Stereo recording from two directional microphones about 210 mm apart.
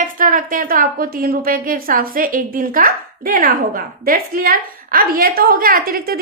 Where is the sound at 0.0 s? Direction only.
40° right (ahead or behind).